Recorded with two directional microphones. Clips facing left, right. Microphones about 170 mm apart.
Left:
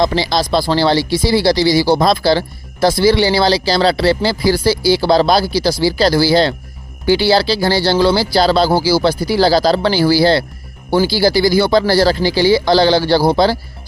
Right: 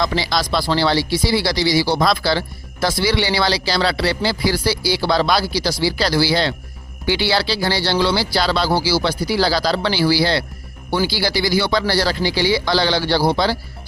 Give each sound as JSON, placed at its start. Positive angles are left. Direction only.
{"t": 0.0, "sound": "speech", "side_deg": 30}
{"t": 2.0, "sound": "speech", "side_deg": 30}
{"t": 3.0, "sound": "speech", "side_deg": 45}
{"t": 3.8, "sound": "speech", "side_deg": 30}
{"t": 5.0, "sound": "speech", "side_deg": 25}
{"t": 5.3, "sound": "speech", "side_deg": 45}